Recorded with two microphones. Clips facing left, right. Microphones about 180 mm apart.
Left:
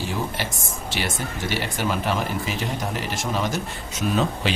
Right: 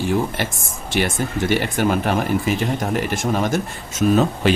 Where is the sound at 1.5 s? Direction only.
55° right (ahead or behind).